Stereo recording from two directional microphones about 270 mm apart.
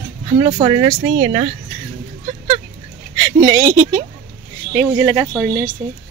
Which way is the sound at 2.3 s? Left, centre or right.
Right.